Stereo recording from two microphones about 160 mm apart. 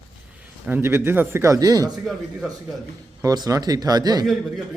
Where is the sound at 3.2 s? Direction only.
20° right (ahead or behind).